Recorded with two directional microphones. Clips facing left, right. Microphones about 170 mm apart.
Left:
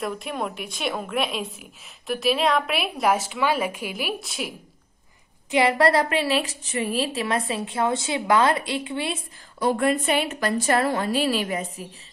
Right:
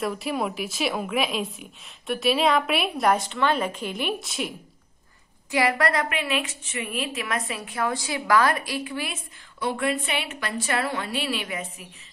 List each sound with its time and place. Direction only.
0.0 s a woman's voice: centre (ahead or behind)
5.5 s a woman's voice: 25° left (ahead or behind)
9.6 s a woman's voice: 40° left (ahead or behind)